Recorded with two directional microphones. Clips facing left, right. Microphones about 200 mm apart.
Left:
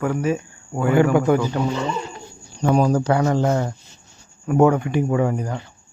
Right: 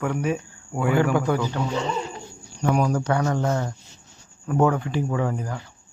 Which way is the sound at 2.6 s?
30° left (ahead or behind).